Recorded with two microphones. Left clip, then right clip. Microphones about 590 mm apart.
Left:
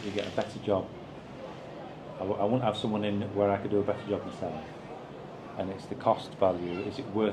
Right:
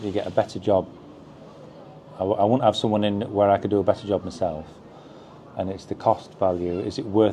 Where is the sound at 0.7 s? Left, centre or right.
Right.